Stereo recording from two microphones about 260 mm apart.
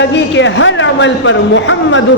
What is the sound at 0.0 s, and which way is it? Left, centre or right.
A man's voice, left.